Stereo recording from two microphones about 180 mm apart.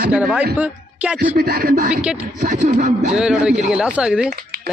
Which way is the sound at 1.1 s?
60° right (ahead or behind).